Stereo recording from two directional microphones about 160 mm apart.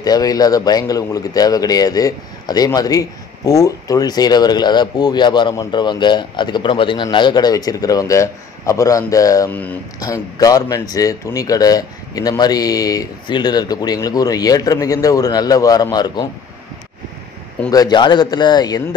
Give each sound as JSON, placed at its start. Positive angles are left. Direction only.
{"t": 0.0, "sound": "speech", "side_deg": 25}
{"t": 17.6, "sound": "speech", "side_deg": 25}